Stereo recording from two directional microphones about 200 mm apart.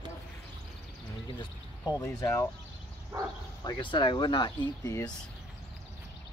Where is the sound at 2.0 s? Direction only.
15° left (ahead or behind).